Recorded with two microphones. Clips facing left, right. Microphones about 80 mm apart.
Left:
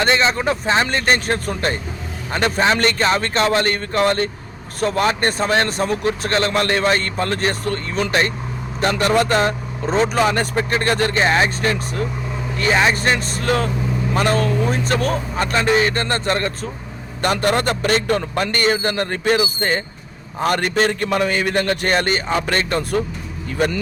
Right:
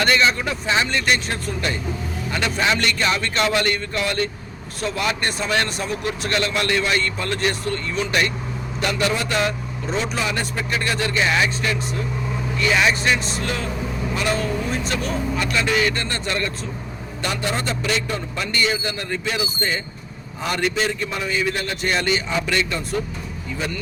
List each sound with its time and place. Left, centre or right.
0.0 s a man's voice: left
17.2 s a man's voice: left